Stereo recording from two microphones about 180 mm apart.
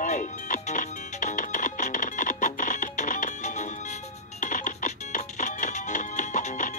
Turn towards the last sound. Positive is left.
turn(degrees=45)  # may be behind; listen again after turning